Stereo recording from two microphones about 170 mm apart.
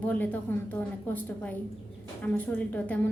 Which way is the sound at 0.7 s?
10° left (ahead or behind).